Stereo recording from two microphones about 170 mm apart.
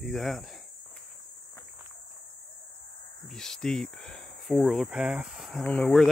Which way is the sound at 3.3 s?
5° left (ahead or behind).